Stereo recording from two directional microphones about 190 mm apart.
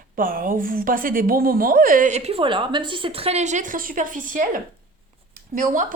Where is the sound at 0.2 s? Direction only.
45° right (ahead or behind).